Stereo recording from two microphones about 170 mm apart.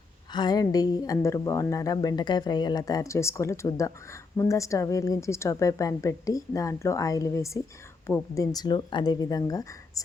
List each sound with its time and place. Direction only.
0.3 s speech: 25° left (ahead or behind)